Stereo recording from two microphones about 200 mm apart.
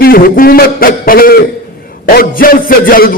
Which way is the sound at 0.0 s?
50° left (ahead or behind).